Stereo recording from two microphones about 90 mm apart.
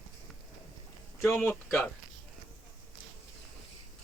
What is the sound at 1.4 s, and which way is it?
Speech, 20° left (ahead or behind).